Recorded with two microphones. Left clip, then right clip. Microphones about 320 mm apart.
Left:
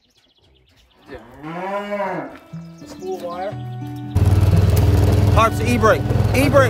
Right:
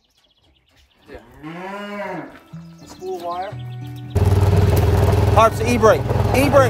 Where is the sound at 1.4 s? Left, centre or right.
Centre.